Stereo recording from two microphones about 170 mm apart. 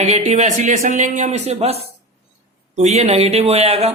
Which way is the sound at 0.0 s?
40° right (ahead or behind).